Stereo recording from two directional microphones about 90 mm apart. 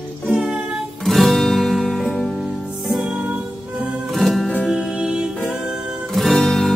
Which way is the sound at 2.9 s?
5° right (ahead or behind).